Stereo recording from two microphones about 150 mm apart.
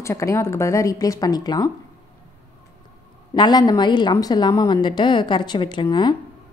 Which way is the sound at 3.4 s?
30° left (ahead or behind).